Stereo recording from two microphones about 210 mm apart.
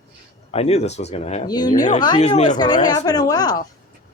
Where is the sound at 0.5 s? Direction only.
30° left (ahead or behind).